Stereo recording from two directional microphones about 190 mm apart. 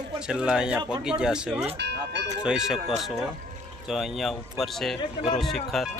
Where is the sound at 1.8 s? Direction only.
65° right (ahead or behind).